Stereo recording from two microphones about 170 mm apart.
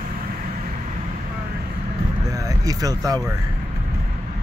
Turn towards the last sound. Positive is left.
turn(degrees=-20)  # may be behind; listen again after turning